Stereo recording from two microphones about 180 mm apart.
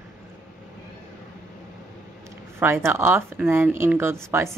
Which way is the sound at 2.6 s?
10° right (ahead or behind).